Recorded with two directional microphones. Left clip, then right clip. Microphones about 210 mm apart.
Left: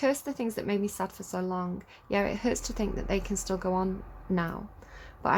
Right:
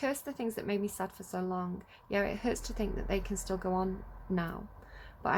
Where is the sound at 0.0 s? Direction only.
15° left (ahead or behind).